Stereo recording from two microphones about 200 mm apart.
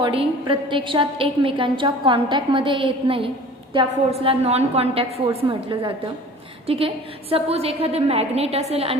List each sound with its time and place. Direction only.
0.0 s a woman's voice: 25° right (ahead or behind)